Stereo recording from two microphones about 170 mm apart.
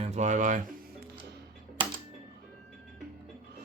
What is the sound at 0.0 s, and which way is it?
Speech, 45° right (ahead or behind).